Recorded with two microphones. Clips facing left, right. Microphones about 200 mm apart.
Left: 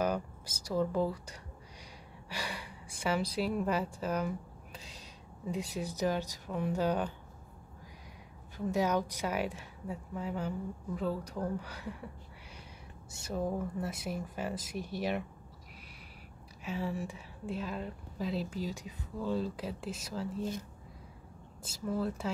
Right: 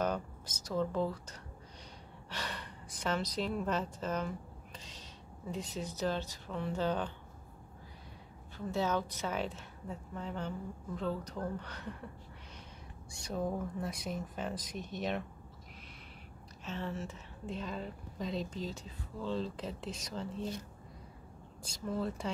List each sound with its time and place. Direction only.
0.0 s a woman's voice: 10° left (ahead or behind)
4.7 s cat: 10° left (ahead or behind)
5.5 s speech: 10° left (ahead or behind)
8.5 s speech: 15° left (ahead or behind)
13.2 s speech: 5° left (ahead or behind)
16.6 s speech: 10° left (ahead or behind)
21.6 s speech: 5° left (ahead or behind)